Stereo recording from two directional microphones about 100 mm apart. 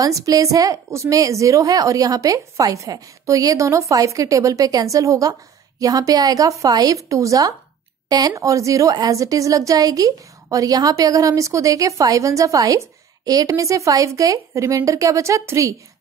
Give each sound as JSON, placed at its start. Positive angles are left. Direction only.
{"t": 0.0, "sound": "a woman's voice", "side_deg": -35}